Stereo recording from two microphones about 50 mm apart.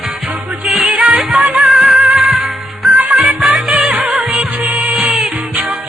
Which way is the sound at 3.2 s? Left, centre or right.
Centre.